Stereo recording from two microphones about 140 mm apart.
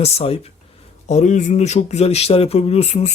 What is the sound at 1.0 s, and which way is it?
Speech, 55° left (ahead or behind).